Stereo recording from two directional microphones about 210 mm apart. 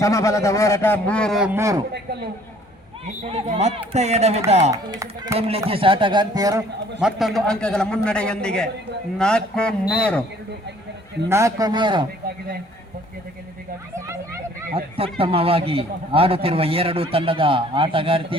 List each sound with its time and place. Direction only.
0.0 s speech: 15° left (ahead or behind)
1.5 s a man's voice: 15° right (ahead or behind)
3.2 s speech: 30° right (ahead or behind)
4.7 s a man's voice: 20° right (ahead or behind)
5.4 s a man's voice: 30° right (ahead or behind)
7.0 s a man's voice: centre (ahead or behind)
11.3 s a man's voice: 15° right (ahead or behind)
15.2 s a man's voice: 25° right (ahead or behind)